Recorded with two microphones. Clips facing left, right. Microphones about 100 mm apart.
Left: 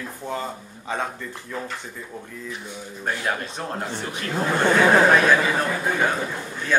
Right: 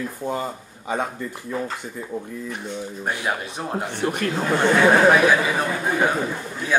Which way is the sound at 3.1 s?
10° right (ahead or behind).